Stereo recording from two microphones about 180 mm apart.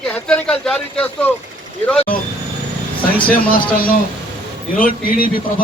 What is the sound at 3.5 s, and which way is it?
A man's voice, 50° left (ahead or behind).